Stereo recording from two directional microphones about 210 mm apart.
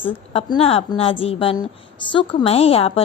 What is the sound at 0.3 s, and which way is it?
A woman's voice, 25° left (ahead or behind).